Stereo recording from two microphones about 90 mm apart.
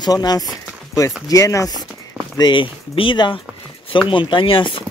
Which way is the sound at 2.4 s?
65° left (ahead or behind).